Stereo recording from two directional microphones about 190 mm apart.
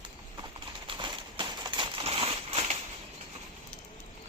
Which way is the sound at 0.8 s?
25° right (ahead or behind).